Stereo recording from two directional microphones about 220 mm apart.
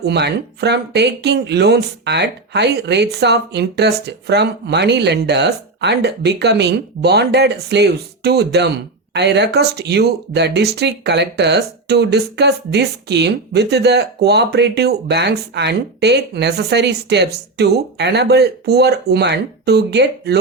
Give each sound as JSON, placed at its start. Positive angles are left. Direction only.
{"t": 0.0, "sound": "speech", "side_deg": -50}